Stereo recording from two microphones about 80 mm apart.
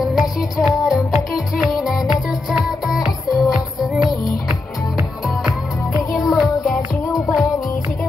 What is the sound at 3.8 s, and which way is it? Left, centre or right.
Music, centre.